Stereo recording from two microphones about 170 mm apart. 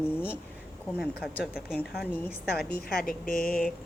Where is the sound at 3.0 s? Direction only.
55° left (ahead or behind).